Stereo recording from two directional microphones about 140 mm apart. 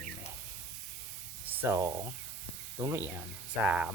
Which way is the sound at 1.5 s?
15° right (ahead or behind).